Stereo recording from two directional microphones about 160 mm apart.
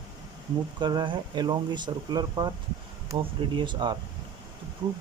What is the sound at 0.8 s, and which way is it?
Speech, 25° right (ahead or behind).